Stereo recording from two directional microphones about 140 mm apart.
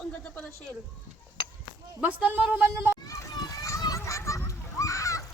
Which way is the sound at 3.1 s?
25° left (ahead or behind).